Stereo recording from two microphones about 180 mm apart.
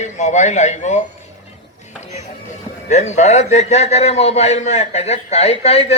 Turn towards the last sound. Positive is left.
turn(degrees=35)  # may be behind; listen again after turning